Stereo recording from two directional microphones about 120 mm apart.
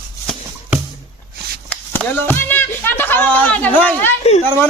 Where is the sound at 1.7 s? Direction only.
15° left (ahead or behind).